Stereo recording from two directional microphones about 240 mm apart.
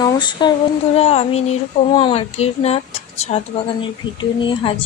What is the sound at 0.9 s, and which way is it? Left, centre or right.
Speech, left.